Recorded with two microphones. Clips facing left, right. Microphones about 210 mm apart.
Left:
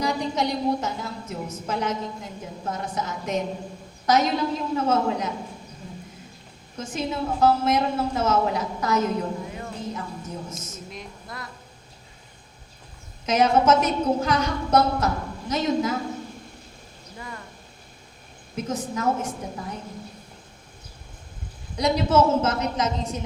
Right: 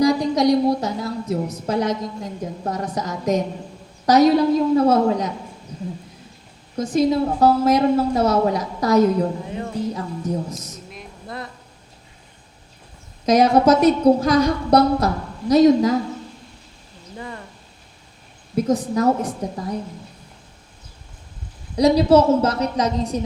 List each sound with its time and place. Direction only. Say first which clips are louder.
0.0 s a woman's voice: right 9 dB; 35° right (ahead or behind)
6.7 s a woman's voice: right 10 dB; 35° right (ahead or behind)
13.2 s a woman's voice: right 5 dB; 35° right (ahead or behind)
18.5 s a woman's voice: right 9 dB; 35° right (ahead or behind)
21.8 s a woman's voice: right 6 dB; 35° right (ahead or behind)